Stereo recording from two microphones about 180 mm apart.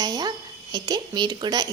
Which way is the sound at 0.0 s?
20° right (ahead or behind).